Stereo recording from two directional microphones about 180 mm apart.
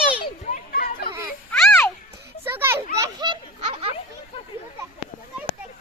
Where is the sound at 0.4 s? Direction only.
50° left (ahead or behind).